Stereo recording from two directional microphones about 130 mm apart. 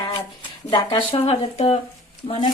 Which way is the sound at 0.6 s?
40° left (ahead or behind).